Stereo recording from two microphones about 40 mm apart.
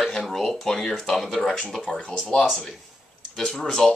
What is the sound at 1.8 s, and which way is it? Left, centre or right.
Speech, left.